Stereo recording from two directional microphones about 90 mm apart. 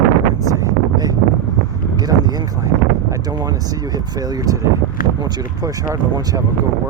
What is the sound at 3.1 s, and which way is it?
Speech, 45° right (ahead or behind).